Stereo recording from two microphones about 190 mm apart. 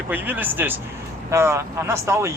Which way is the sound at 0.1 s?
10° right (ahead or behind).